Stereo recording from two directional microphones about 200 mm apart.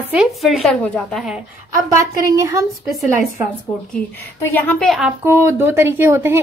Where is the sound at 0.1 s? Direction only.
Centre (ahead or behind).